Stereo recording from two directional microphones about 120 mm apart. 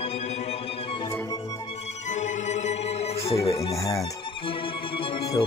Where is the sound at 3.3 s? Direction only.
50° left (ahead or behind).